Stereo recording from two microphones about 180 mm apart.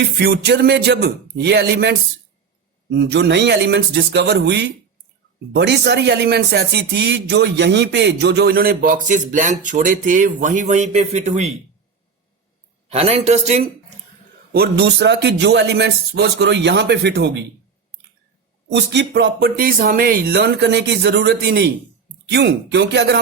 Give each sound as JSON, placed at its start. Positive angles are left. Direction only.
{"t": 0.2, "sound": "speech", "side_deg": -65}
{"t": 2.9, "sound": "speech", "side_deg": -70}
{"t": 12.9, "sound": "speech", "side_deg": -35}
{"t": 14.5, "sound": "speech", "side_deg": -60}
{"t": 18.7, "sound": "speech", "side_deg": -75}